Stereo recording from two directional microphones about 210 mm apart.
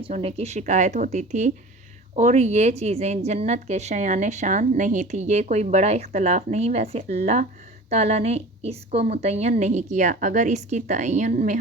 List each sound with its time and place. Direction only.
0.0 s a woman's voice: 25° right (ahead or behind)